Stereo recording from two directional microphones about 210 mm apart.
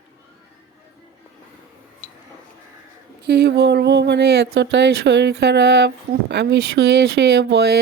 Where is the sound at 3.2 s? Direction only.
50° right (ahead or behind).